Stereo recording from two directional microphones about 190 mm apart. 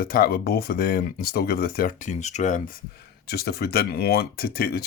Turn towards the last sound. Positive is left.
turn(degrees=55)  # may be behind; listen again after turning